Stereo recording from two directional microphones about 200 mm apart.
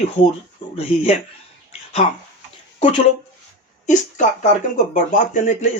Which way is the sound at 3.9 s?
40° left (ahead or behind).